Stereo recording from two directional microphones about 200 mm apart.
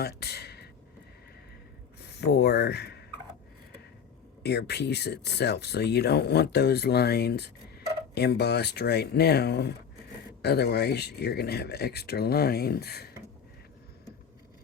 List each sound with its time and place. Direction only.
0.0 s speech: 55° left (ahead or behind)
2.0 s speech: 55° left (ahead or behind)
4.4 s speech: 55° left (ahead or behind)